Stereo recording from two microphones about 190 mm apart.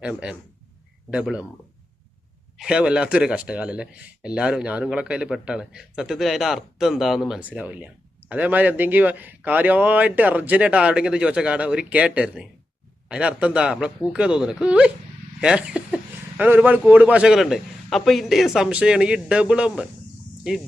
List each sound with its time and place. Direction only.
0.0 s speech: 5° right (ahead or behind)
2.6 s speech: 5° right (ahead or behind)